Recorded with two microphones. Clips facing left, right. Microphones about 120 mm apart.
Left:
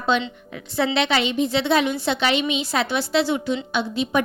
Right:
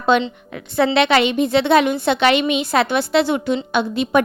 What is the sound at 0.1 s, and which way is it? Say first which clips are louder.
A woman's voice: right 6 dB; 55° right (ahead or behind).